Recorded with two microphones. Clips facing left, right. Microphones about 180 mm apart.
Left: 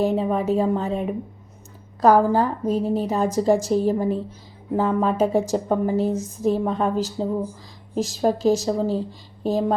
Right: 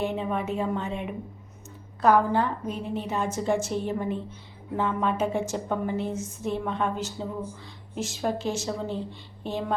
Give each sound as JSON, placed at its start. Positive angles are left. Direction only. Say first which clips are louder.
{"t": 0.0, "sound": "a woman's voice", "louder": "left 7 dB", "side_deg": 35}